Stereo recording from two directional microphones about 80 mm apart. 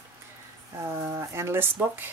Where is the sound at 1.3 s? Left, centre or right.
Right.